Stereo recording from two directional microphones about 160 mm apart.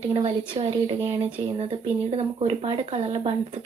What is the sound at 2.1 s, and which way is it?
A woman's voice, 40° right (ahead or behind).